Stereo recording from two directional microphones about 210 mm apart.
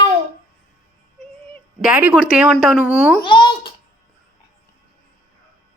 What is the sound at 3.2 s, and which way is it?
Speech, 20° left (ahead or behind).